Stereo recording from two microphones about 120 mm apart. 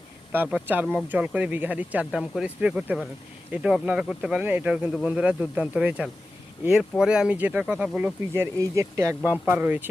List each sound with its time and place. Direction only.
0.3 s speech: 10° right (ahead or behind)
8.3 s speech: 25° right (ahead or behind)
9.3 s speech: 10° right (ahead or behind)